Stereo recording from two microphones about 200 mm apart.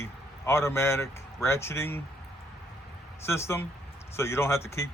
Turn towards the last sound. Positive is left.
turn(degrees=10)  # may be behind; listen again after turning